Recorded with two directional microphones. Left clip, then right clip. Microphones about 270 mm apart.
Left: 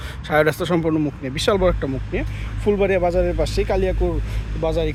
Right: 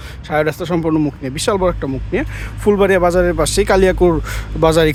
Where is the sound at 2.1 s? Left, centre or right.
Centre.